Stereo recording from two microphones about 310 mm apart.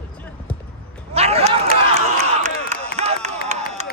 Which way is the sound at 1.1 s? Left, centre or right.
Centre.